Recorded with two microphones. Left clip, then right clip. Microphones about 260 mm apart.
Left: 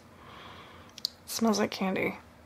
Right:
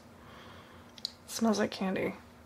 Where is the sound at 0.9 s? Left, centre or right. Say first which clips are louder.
Left 4 dB; centre.